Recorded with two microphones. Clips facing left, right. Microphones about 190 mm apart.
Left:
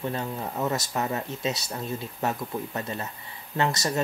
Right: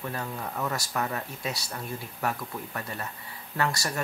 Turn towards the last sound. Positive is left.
turn(degrees=20)  # may be behind; listen again after turning